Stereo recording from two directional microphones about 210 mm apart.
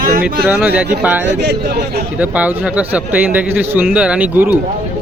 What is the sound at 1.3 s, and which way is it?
Speech, 55° right (ahead or behind).